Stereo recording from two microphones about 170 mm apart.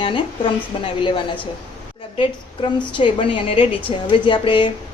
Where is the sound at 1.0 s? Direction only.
30° left (ahead or behind).